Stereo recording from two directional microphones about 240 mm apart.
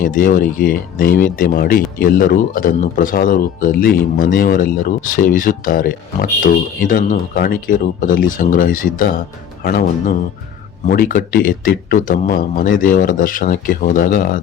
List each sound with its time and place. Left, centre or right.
0.0 s speech: left